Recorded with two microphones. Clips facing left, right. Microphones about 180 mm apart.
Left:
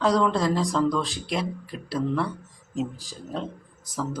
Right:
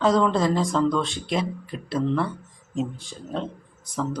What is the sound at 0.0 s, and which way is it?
Speech, centre (ahead or behind).